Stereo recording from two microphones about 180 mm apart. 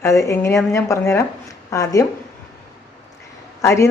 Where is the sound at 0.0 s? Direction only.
15° left (ahead or behind).